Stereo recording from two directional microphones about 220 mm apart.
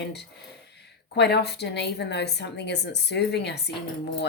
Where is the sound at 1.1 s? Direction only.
50° left (ahead or behind).